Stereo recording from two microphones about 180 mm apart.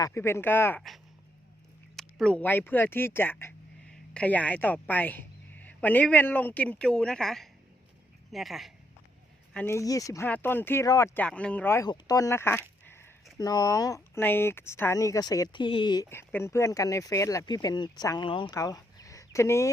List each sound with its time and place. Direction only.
0.0 s speech: 15° left (ahead or behind)
2.0 s a woman's voice: 5° left (ahead or behind)
9.5 s speech: 10° left (ahead or behind)
12.8 s a sound: 10° left (ahead or behind)
13.3 s speech: 20° left (ahead or behind)
16.0 s speech: 15° left (ahead or behind)